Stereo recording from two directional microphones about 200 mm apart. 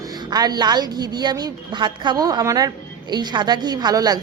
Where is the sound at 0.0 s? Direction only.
20° right (ahead or behind).